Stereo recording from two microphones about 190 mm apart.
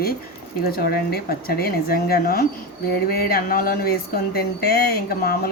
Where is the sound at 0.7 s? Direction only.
55° left (ahead or behind).